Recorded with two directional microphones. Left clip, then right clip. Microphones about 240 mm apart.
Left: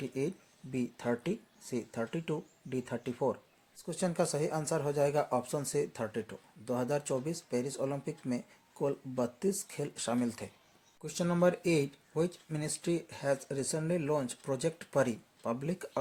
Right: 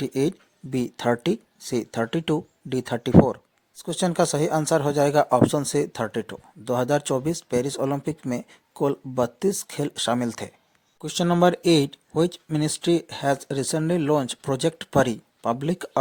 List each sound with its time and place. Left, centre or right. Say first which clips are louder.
0.0 s speech: right 12 dB; right